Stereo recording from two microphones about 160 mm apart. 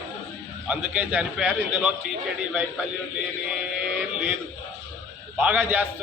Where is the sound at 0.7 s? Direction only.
10° right (ahead or behind).